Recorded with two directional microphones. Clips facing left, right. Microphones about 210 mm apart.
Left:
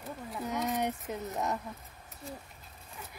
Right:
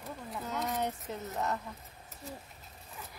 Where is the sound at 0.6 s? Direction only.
15° left (ahead or behind).